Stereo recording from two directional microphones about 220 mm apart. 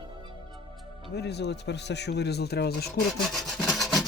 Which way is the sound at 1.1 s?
50° left (ahead or behind).